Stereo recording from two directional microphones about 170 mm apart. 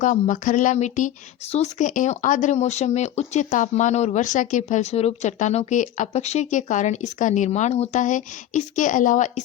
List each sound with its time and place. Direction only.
0.0 s speech: 50° left (ahead or behind)